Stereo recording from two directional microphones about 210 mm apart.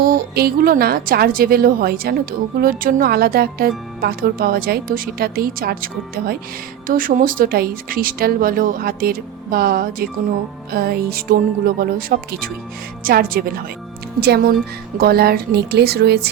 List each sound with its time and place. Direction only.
0.0 s speech: 45° right (ahead or behind)